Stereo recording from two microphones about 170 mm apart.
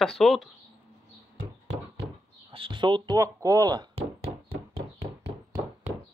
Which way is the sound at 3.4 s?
20° right (ahead or behind).